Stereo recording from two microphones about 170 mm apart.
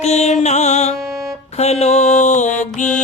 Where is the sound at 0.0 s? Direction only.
40° left (ahead or behind).